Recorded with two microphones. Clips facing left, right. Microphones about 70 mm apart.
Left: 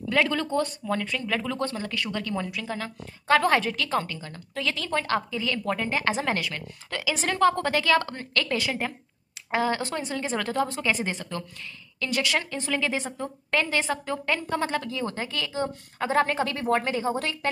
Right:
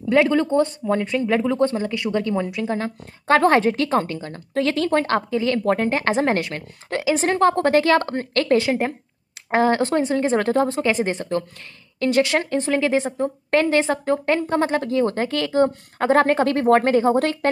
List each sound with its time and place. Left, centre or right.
0.1 s speech: right